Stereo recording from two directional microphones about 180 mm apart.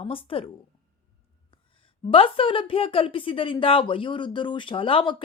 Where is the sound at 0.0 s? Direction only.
30° left (ahead or behind).